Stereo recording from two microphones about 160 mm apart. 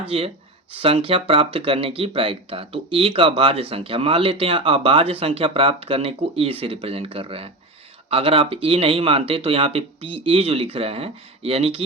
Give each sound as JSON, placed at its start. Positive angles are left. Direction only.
{"t": 0.1, "sound": "speech", "side_deg": -35}